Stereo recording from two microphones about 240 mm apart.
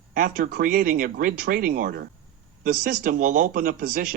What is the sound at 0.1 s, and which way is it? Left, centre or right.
Speech, right.